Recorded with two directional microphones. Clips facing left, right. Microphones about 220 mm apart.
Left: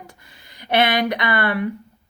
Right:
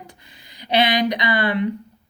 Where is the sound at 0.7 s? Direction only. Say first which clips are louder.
Even; 55° left (ahead or behind).